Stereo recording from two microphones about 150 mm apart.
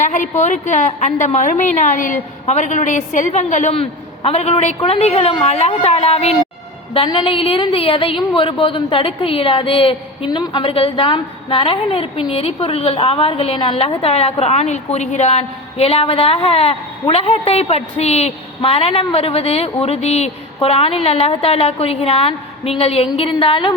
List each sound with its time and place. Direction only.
0.0 s a woman's voice: 55° left (ahead or behind)
6.9 s a woman's voice: 30° left (ahead or behind)